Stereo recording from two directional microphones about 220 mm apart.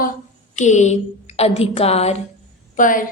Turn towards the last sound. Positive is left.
turn(degrees=35)  # may be behind; listen again after turning